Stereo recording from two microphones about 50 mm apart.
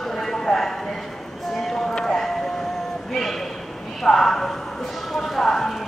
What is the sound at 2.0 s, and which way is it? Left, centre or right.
Vehicle, centre.